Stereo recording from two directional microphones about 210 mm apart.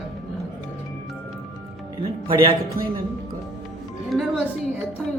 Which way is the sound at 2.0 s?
25° right (ahead or behind).